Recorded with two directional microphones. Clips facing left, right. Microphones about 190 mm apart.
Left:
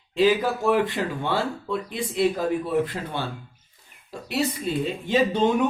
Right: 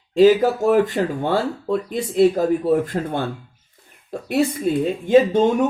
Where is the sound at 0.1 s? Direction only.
45° right (ahead or behind).